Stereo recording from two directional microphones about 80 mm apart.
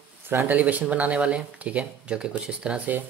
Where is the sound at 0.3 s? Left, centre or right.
Right.